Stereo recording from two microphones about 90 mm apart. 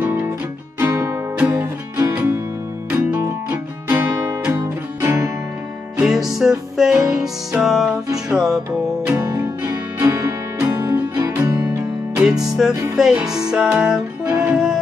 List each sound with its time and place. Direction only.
0.0 s music: 20° right (ahead or behind)
2.9 s music: 20° right (ahead or behind)
5.0 s guitar: 30° right (ahead or behind)
5.9 s music: 5° right (ahead or behind)
9.9 s music: 30° right (ahead or behind)
12.2 s music: 5° right (ahead or behind)